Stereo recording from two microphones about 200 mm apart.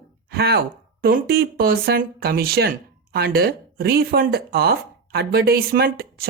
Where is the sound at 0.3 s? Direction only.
50° right (ahead or behind).